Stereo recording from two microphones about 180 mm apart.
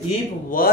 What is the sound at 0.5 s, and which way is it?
Speech, 50° left (ahead or behind).